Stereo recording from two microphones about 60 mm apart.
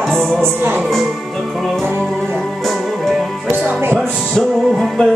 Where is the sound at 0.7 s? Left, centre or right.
Centre.